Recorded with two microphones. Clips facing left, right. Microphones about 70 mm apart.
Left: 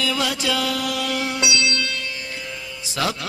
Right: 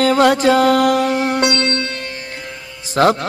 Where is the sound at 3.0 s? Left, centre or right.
Right.